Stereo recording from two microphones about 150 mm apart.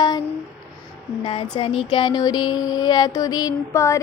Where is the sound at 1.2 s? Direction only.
35° left (ahead or behind).